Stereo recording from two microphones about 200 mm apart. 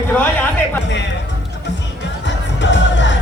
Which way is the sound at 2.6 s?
65° left (ahead or behind).